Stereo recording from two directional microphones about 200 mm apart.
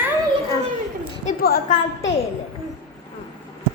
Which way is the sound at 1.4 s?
45° left (ahead or behind).